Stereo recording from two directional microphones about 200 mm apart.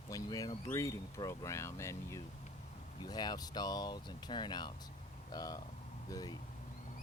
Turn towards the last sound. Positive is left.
turn(degrees=20)  # may be behind; listen again after turning